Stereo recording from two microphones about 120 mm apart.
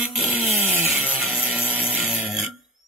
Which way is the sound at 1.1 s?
Centre (ahead or behind).